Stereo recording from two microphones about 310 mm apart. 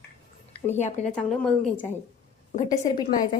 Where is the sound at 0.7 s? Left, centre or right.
Left.